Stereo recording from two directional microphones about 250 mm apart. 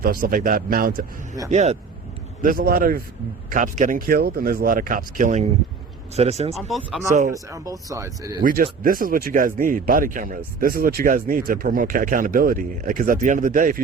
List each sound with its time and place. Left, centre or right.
0.0 s speech: right
7.3 s speech: centre
8.4 s speech: right